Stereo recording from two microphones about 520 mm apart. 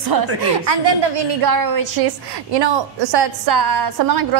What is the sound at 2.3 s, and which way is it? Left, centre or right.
A woman's voice, right.